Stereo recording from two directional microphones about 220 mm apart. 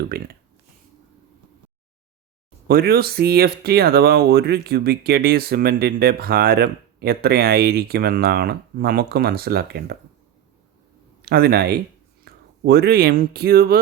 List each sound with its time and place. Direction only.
0.1 s speech: 45° right (ahead or behind)
2.6 s speech: 45° right (ahead or behind)
11.3 s speech: 45° right (ahead or behind)